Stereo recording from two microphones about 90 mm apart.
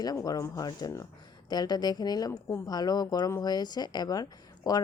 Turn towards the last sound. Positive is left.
turn(degrees=45)  # may be behind; listen again after turning